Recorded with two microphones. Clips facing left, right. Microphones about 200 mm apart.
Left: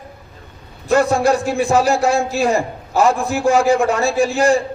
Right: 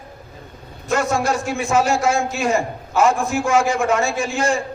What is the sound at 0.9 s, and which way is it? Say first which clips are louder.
A man's voice: left 5 dB; 35° left (ahead or behind).